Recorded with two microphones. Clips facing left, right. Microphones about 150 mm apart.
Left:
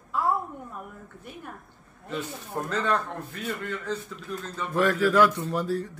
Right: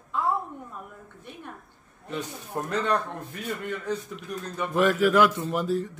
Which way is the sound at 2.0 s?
15° right (ahead or behind).